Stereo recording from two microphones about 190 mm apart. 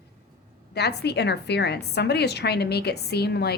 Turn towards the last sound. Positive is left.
turn(degrees=60)  # may be behind; listen again after turning